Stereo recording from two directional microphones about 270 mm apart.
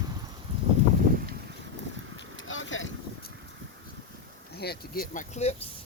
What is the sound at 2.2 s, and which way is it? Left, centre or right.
Vehicle, left.